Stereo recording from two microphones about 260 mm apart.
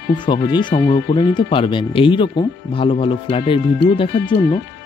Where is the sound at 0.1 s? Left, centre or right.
Centre.